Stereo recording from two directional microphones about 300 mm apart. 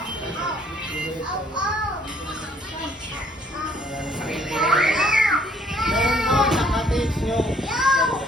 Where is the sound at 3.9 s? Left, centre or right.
Centre.